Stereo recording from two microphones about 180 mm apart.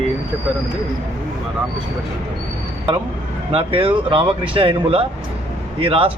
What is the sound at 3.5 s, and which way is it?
A man's voice, 30° right (ahead or behind).